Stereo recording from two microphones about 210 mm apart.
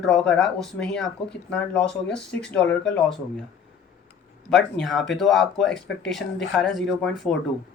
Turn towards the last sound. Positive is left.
turn(degrees=0)  # may be behind; listen again after turning